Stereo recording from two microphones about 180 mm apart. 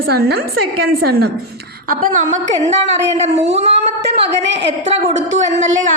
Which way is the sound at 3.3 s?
85° right.